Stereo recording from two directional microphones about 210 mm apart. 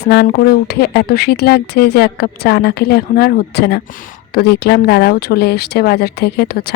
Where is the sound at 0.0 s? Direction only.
50° left (ahead or behind).